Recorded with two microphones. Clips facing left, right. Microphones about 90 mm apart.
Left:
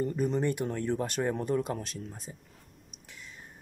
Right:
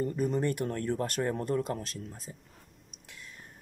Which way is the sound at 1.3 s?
5° left (ahead or behind).